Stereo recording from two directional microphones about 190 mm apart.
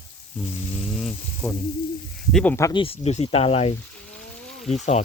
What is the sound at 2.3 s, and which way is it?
Speech, 10° left (ahead or behind).